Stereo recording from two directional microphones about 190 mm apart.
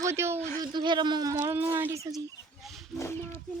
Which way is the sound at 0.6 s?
25° right (ahead or behind).